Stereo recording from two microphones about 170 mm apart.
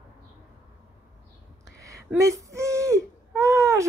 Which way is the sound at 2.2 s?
20° right (ahead or behind).